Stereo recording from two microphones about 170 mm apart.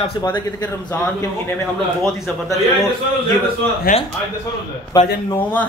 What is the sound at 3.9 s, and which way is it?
Speech, 55° left (ahead or behind).